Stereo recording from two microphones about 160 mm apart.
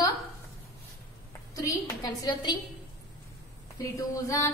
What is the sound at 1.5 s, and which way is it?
A woman's voice, 20° left (ahead or behind).